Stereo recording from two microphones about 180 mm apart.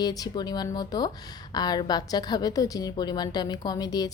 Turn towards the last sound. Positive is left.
turn(degrees=20)  # may be behind; listen again after turning